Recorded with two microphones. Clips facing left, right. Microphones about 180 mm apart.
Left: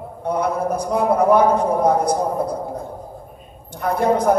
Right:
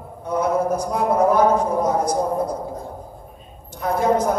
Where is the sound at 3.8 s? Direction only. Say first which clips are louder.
Left 1 dB; 60° left (ahead or behind).